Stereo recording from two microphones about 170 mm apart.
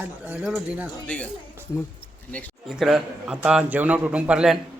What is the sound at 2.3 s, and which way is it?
A man's voice, centre (ahead or behind).